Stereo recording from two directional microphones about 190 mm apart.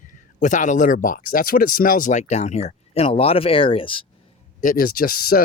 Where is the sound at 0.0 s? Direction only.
40° left (ahead or behind).